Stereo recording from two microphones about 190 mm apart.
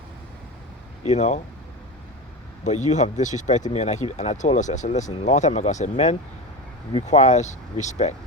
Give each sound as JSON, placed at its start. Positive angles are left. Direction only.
{"t": 1.0, "sound": "speech", "side_deg": 35}
{"t": 2.6, "sound": "speech", "side_deg": 40}